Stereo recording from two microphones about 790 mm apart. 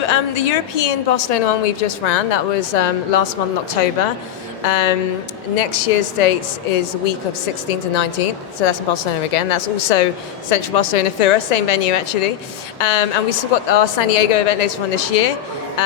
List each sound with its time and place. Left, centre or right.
0.1 s a woman's voice: left
4.6 s a woman's voice: left